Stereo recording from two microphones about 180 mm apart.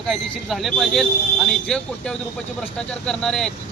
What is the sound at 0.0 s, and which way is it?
Speech, centre (ahead or behind).